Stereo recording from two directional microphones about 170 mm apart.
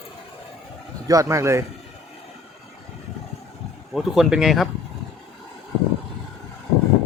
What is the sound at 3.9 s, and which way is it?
Speech, centre (ahead or behind).